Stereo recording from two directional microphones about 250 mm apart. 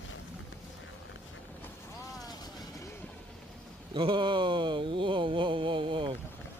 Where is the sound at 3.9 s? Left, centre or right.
Centre.